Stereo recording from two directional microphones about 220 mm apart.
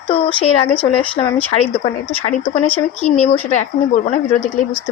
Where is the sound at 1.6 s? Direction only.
25° left (ahead or behind).